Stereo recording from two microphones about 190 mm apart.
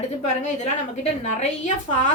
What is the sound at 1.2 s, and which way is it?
Speech, 40° left (ahead or behind).